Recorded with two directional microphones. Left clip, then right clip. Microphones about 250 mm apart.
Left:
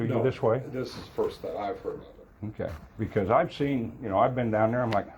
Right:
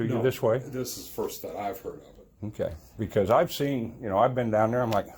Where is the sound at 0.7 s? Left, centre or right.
Right.